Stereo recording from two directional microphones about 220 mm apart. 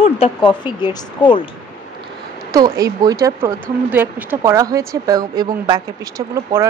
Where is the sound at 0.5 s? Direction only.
20° left (ahead or behind).